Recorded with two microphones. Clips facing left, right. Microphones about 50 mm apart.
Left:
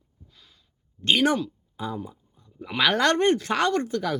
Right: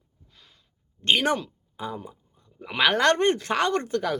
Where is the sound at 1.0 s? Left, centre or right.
Right.